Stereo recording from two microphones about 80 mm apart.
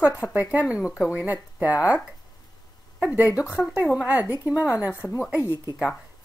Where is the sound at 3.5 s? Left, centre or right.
Centre; by 5.7 s right.